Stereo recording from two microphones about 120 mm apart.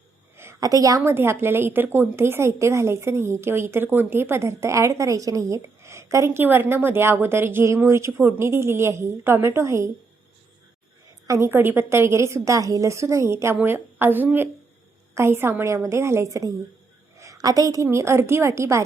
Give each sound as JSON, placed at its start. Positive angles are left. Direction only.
{"t": 0.3, "sound": "a woman's voice", "side_deg": -25}
{"t": 11.3, "sound": "a woman's voice", "side_deg": -20}
{"t": 17.2, "sound": "a sound", "side_deg": -30}
{"t": 17.8, "sound": "a woman's voice", "side_deg": -20}